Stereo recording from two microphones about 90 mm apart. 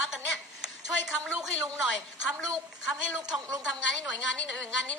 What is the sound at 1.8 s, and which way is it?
Speech, 10° right (ahead or behind).